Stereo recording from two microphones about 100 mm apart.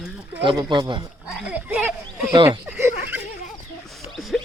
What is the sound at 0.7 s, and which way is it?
Speech, 50° right (ahead or behind).